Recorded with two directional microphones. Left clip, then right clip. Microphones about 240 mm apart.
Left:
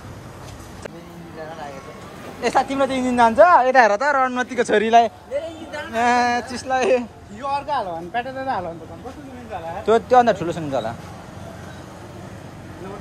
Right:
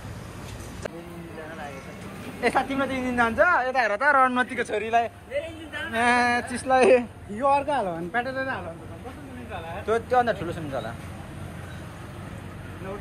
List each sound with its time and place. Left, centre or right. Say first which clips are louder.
2.4 s speech: left 5 dB; centre
3.9 s speech: left 2 dB; centre
4.6 s a man's voice: left 9 dB; left
5.9 s speech: left 4 dB; centre
7.4 s speech: right 1 dB; right
8.1 s speech: left 1 dB; centre
9.8 s speech: left 8 dB; left